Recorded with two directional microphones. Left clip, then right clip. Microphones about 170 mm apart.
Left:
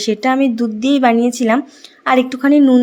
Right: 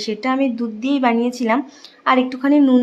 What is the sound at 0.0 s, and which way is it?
A woman's voice, 25° left (ahead or behind).